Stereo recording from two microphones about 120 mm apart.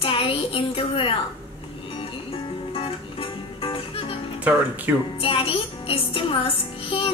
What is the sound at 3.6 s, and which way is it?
Music, 50° left (ahead or behind).